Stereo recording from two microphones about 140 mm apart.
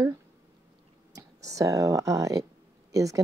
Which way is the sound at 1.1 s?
25° right (ahead or behind).